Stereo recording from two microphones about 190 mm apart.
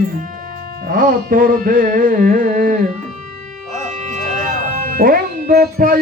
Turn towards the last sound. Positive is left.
turn(degrees=-50)  # may be behind; listen again after turning